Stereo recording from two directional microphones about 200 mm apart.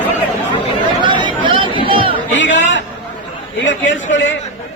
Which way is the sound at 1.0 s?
25° right (ahead or behind).